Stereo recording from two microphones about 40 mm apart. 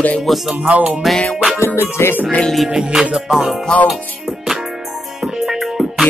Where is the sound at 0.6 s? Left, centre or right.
Right.